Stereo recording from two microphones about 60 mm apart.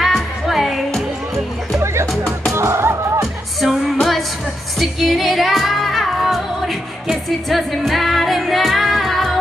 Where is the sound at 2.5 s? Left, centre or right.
Right.